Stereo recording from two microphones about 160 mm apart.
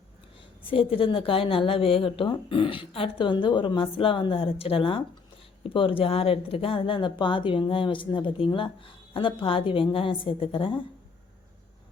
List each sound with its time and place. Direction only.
0.3 s speech: 35° left (ahead or behind)